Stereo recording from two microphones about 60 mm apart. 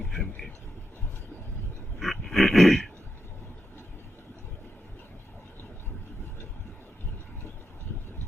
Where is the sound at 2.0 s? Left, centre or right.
Centre.